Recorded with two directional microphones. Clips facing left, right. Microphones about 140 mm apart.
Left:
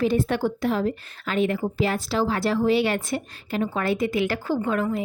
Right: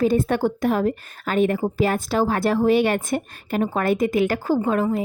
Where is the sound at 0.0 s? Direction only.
45° right (ahead or behind).